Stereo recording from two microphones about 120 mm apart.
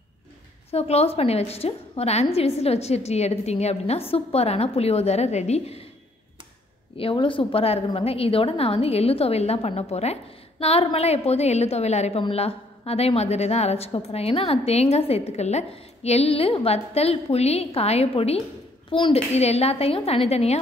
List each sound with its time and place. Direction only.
0.7 s a woman's voice: 60° left (ahead or behind)
7.0 s a woman's voice: 45° left (ahead or behind); by 12.2 s 65° left (ahead or behind)
12.2 s a woman's voice: 50° left (ahead or behind)
18.9 s a child's voice: 45° left (ahead or behind)
19.3 s a woman's voice: 60° left (ahead or behind)